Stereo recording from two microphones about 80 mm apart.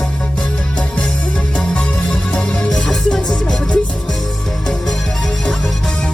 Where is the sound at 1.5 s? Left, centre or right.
Centre.